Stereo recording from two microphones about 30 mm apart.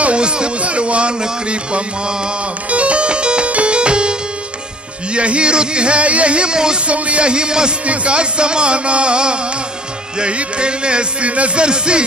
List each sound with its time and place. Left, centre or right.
0.0 s a sound: right
1.5 s music: right
6.9 s music: right
7.8 s music: right